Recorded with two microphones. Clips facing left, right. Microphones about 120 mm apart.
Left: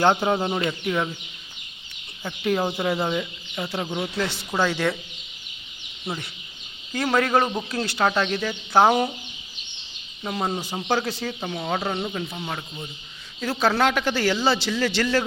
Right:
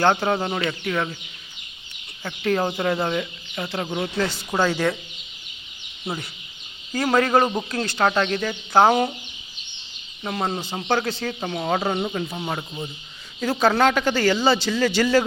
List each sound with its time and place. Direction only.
0.0 s speech: 15° left (ahead or behind)
2.2 s a man's voice: 10° left (ahead or behind)
6.1 s a man's voice: centre (ahead or behind)
10.2 s a man's voice: 10° left (ahead or behind)
12.5 s speech: 15° right (ahead or behind)
13.4 s a man's voice: centre (ahead or behind)